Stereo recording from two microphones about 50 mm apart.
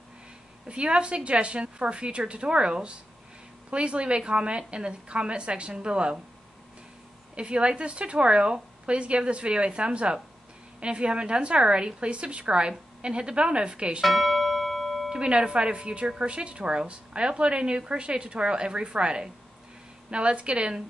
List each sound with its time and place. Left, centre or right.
0.7 s a woman's voice: right
7.3 s a woman's voice: right
14.0 s music: centre
15.0 s a woman's voice: centre